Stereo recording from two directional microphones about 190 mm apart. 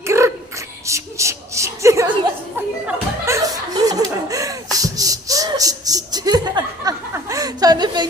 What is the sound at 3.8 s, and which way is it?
Laughter, 20° right (ahead or behind).